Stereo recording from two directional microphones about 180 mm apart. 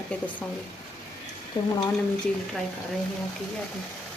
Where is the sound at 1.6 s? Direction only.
25° left (ahead or behind).